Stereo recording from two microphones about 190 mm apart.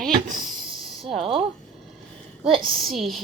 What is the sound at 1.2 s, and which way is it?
Speech, 30° right (ahead or behind).